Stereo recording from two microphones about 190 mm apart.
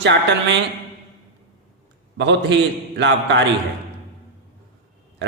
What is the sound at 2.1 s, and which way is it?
A man's voice, 70° right (ahead or behind).